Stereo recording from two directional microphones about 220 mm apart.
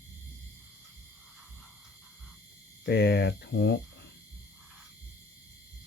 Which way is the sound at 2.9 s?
50° left (ahead or behind).